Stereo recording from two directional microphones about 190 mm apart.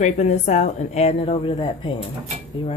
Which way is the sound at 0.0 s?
40° left (ahead or behind).